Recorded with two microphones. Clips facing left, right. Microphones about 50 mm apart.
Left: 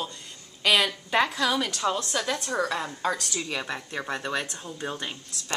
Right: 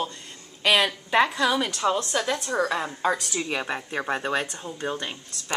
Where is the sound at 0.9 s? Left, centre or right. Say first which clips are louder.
Right 3 dB; centre.